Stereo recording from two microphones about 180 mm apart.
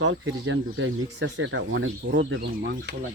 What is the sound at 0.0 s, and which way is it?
Speech, 90° right.